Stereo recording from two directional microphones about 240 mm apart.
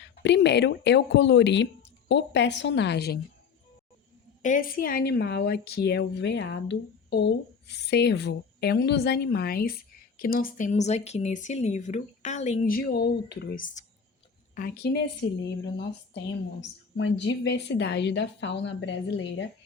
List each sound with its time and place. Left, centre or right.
0.2 s a woman's voice: left
4.4 s a woman's voice: left
16.6 s a woman's voice: left